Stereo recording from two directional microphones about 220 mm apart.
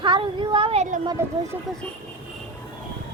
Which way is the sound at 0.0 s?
20° right (ahead or behind).